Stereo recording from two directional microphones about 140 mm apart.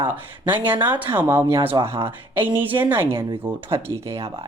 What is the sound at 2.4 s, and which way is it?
Speech, 15° right (ahead or behind).